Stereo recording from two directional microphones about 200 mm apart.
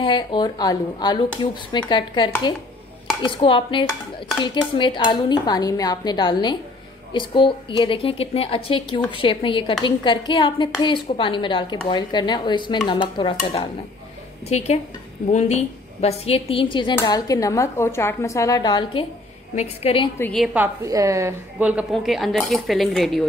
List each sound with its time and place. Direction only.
0.0 s a woman's voice: 25° left (ahead or behind)
15.2 s a woman's voice: 35° left (ahead or behind)
20.2 s a woman's voice: 5° left (ahead or behind)